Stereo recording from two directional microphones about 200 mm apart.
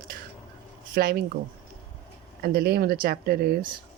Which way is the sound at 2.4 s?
50° right (ahead or behind).